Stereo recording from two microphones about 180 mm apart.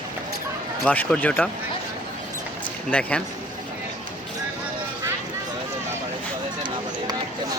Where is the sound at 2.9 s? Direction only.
5° left (ahead or behind).